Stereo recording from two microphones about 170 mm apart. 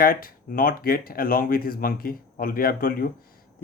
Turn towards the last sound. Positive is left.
turn(degrees=60)  # may be behind; listen again after turning